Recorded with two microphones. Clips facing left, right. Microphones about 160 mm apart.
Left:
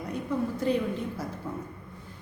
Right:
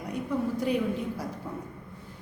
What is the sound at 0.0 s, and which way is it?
A woman's voice, 10° right (ahead or behind).